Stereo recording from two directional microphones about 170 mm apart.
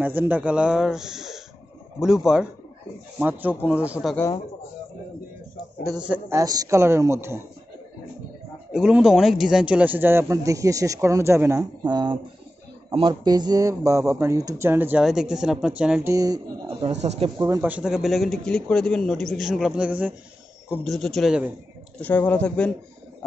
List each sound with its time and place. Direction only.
0.0 s a man's voice: 10° right (ahead or behind)
5.9 s a man's voice: 10° right (ahead or behind)
8.7 s a man's voice: 5° right (ahead or behind)
16.1 s speech: 20° right (ahead or behind)
16.8 s speech: 40° right (ahead or behind)
17.4 s a man's voice: 15° right (ahead or behind)
22.0 s speech: 10° left (ahead or behind)